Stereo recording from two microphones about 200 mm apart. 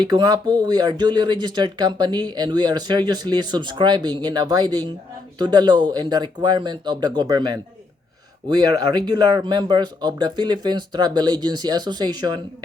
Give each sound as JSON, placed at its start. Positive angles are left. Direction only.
{"t": 0.0, "sound": "speech", "side_deg": -20}